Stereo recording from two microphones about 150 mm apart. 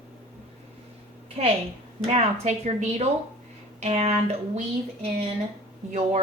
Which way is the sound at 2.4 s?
50° right (ahead or behind).